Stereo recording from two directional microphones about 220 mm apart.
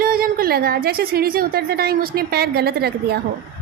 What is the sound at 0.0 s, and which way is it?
A woman's voice, 40° right (ahead or behind).